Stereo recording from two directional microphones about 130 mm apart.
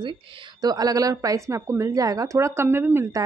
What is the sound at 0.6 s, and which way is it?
Speech, 30° right (ahead or behind).